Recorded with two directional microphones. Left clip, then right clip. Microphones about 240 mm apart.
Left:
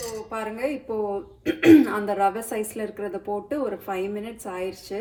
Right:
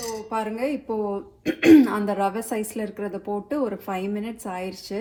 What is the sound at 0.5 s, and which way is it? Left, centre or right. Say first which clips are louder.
A woman's voice: right 1 dB; right.